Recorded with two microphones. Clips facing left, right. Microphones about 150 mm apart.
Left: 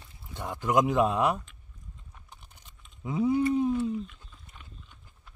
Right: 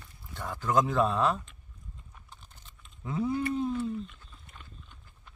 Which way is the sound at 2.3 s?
15° left (ahead or behind).